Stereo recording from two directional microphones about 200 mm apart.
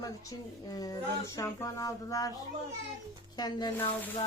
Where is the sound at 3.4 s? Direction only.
20° left (ahead or behind).